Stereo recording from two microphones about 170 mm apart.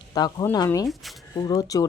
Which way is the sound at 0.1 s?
25° left (ahead or behind).